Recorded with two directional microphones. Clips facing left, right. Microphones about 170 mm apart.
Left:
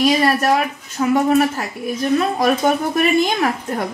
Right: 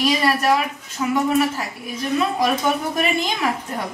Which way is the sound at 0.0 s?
45° left (ahead or behind).